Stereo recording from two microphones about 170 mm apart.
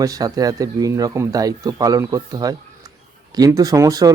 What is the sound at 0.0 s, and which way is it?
Speech, 20° right (ahead or behind).